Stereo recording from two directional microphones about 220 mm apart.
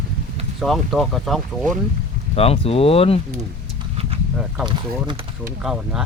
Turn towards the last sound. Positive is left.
turn(degrees=0)  # may be behind; listen again after turning